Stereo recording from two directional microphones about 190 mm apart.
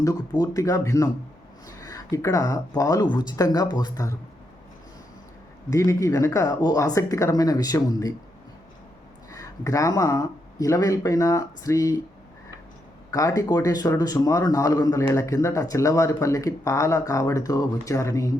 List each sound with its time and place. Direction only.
0.0 s speech: 20° left (ahead or behind)
5.7 s speech: 15° left (ahead or behind)
9.3 s speech: 15° left (ahead or behind)
13.1 s speech: 20° left (ahead or behind)